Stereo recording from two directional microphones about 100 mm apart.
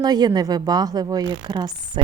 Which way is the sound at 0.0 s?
45° right (ahead or behind).